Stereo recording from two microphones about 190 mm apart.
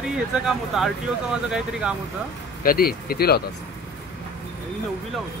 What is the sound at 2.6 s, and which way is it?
Speech, 50° left (ahead or behind).